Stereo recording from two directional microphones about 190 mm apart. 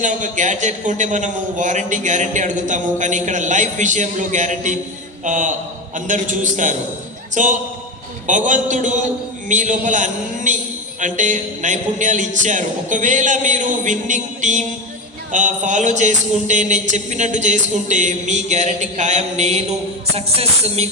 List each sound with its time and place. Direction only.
0.0 s a man's voice: 40° right (ahead or behind)